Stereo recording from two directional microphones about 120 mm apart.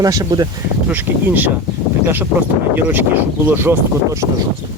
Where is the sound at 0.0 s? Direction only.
30° right (ahead or behind).